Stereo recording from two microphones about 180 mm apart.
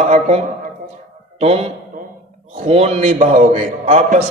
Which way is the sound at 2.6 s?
35° right (ahead or behind).